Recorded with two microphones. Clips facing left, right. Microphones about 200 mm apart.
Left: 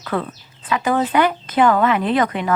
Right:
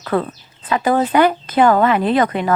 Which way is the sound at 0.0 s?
40° right (ahead or behind).